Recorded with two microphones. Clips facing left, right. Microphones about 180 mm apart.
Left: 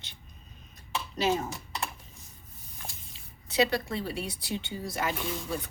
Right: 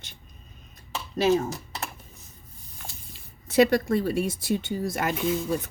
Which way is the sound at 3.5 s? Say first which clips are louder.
Right 7 dB; 50° right (ahead or behind).